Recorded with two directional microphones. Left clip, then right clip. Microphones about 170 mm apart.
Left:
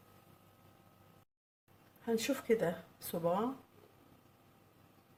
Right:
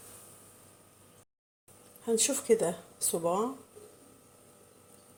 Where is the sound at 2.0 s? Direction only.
25° right (ahead or behind).